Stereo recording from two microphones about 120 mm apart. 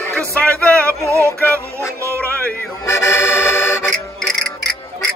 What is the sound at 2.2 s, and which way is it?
Music, 15° left (ahead or behind).